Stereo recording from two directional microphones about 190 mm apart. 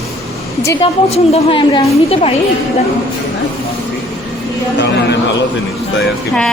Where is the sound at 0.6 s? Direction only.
15° left (ahead or behind).